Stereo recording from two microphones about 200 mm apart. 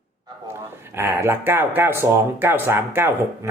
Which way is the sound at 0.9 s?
10° right (ahead or behind).